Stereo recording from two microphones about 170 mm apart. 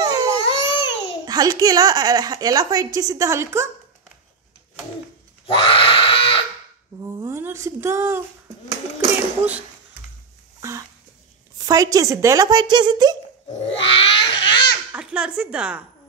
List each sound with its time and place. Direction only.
0.0 s baby cry: 20° right (ahead or behind)
0.4 s baby cry: 35° left (ahead or behind)
1.2 s a woman's voice: 20° right (ahead or behind)
5.5 s a sound: 30° left (ahead or behind)
7.2 s a woman's voice: 15° right (ahead or behind)
11.6 s a woman's voice: 20° right (ahead or behind)
13.5 s grunt: 35° left (ahead or behind)
14.9 s speech: 5° right (ahead or behind)